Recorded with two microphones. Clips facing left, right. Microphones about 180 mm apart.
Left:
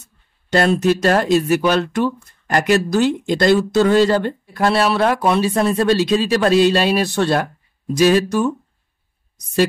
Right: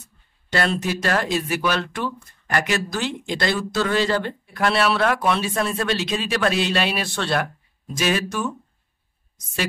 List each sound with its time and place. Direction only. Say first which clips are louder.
0.5 s speech: left 8 dB; 45° left (ahead or behind)